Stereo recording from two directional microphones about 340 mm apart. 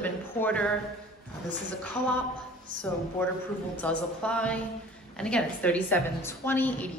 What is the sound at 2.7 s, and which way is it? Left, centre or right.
Speech, right.